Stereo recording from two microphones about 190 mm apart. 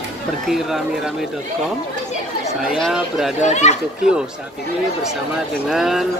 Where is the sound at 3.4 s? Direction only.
40° left (ahead or behind).